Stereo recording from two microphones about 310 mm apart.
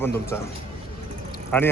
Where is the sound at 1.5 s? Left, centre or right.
Centre.